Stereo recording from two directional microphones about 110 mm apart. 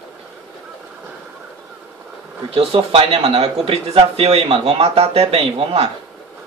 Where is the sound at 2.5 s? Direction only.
55° right (ahead or behind).